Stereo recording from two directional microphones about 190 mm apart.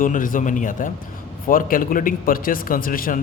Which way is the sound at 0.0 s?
45° left (ahead or behind).